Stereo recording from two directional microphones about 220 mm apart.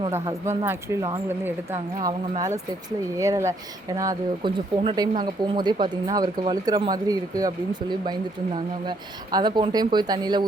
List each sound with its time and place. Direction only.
0.1 s speech: 10° right (ahead or behind)
3.2 s speech: 15° right (ahead or behind)